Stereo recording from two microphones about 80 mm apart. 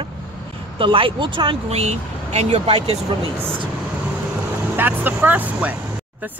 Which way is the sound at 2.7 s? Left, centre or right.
Right.